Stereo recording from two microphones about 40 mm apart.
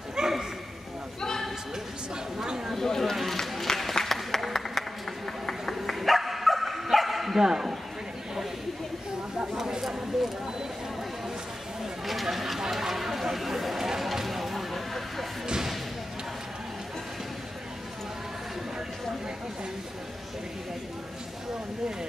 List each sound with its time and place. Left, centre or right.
0.1 s bow-wow: centre
2.4 s chatter: centre
2.7 s a sound: centre
3.2 s applause: centre
5.8 s bow-wow: centre
7.4 s speech: centre
9.6 s a sound: centre
12.1 s a sound: centre
15.4 s slam: centre